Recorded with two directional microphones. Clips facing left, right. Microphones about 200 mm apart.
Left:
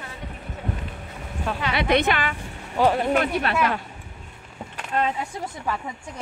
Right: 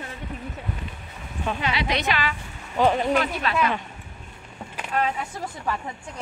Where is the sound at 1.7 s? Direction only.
55° left (ahead or behind).